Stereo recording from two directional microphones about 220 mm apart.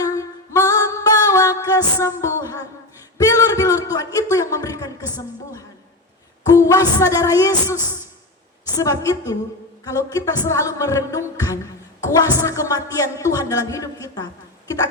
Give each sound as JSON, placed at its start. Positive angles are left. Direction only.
{"t": 0.0, "sound": "music", "side_deg": 15}
{"t": 3.2, "sound": "a man's voice", "side_deg": 15}
{"t": 6.4, "sound": "a sound", "side_deg": 15}
{"t": 7.0, "sound": "speech", "side_deg": 15}